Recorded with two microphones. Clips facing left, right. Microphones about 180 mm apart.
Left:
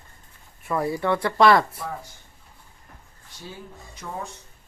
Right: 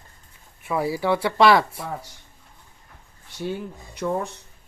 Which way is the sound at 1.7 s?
75° right (ahead or behind).